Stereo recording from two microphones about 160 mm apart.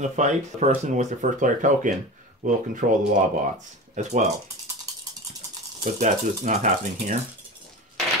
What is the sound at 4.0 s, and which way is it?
Speech, 50° right (ahead or behind).